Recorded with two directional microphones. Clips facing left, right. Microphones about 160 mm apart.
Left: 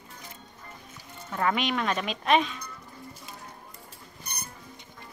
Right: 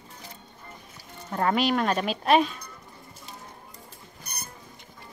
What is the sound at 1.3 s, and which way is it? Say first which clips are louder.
Speech: right 3 dB; 40° right (ahead or behind).